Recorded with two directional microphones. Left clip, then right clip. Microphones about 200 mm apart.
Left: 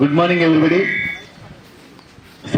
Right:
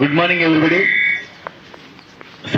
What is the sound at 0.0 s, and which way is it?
Speech, 65° left (ahead or behind).